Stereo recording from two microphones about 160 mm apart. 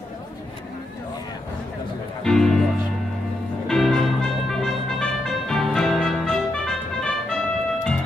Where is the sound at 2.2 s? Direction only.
5° left (ahead or behind).